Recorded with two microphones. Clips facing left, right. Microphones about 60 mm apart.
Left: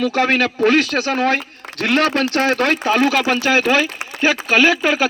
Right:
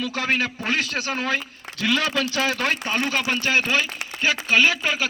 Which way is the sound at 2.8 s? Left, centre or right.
Left.